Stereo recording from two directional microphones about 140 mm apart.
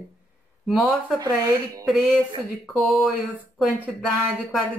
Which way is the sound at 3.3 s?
10° right (ahead or behind).